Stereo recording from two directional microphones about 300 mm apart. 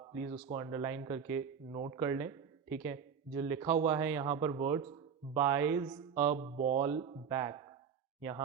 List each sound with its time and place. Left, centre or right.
0.1 s speech: right
6.1 s speech: right